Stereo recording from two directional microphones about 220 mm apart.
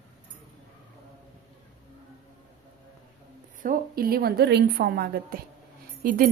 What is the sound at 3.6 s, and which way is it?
A woman's voice, 40° right (ahead or behind).